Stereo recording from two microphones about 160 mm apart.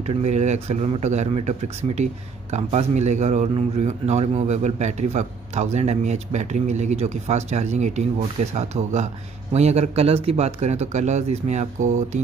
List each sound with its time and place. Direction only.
0.0 s a man's voice: 40° right (ahead or behind)